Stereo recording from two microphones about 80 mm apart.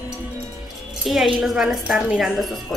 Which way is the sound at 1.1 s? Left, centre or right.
Centre.